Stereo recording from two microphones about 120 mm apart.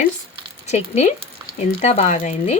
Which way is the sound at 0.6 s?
70° left (ahead or behind).